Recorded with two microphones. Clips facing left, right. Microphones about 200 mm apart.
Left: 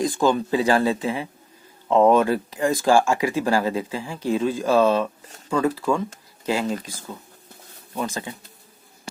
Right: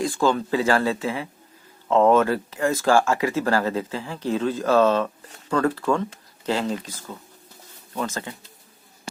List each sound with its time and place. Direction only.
0.0 s speech: 20° left (ahead or behind)